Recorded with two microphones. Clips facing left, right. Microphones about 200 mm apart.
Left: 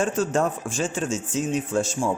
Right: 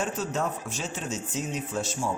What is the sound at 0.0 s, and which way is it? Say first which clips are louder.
Speech: left 7 dB; 50° left (ahead or behind).